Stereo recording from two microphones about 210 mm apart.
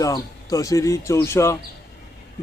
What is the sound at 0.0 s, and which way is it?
Speech, 15° left (ahead or behind).